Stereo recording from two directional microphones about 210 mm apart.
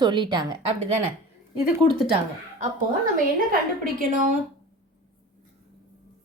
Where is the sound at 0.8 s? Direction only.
30° right (ahead or behind).